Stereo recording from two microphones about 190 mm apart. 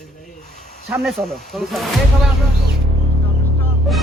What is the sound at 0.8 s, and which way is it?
Speech, centre (ahead or behind).